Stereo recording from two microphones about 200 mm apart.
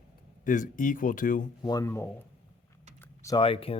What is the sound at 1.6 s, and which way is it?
Speech, 15° left (ahead or behind).